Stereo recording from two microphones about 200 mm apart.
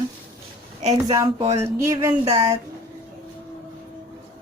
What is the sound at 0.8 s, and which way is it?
Speech, 35° right (ahead or behind).